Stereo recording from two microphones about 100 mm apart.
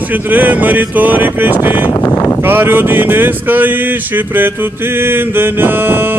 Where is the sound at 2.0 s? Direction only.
30° left (ahead or behind).